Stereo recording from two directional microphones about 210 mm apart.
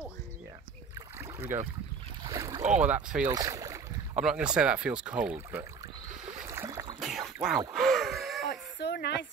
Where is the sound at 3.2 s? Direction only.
15° right (ahead or behind).